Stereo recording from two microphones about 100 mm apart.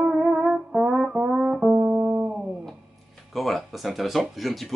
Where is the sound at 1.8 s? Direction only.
20° right (ahead or behind).